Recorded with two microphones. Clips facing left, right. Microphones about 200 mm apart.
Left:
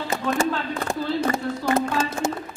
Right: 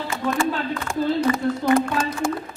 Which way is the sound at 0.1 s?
40° left (ahead or behind).